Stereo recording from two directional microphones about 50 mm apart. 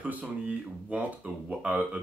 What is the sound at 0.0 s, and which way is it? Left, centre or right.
Speech, right.